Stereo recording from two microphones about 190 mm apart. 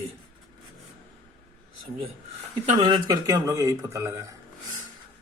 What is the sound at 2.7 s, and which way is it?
A man's voice, 25° right (ahead or behind).